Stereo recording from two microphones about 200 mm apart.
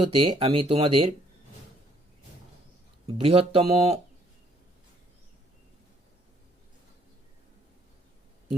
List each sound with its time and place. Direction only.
0.0 s speech: 25° right (ahead or behind)
3.1 s speech: 25° right (ahead or behind)